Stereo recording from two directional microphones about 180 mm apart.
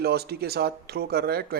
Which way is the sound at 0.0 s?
60° right (ahead or behind).